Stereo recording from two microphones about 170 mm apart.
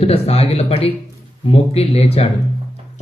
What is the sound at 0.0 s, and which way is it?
Speech, 35° left (ahead or behind).